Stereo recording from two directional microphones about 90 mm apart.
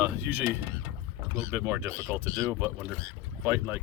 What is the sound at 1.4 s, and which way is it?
Speech, 30° right (ahead or behind).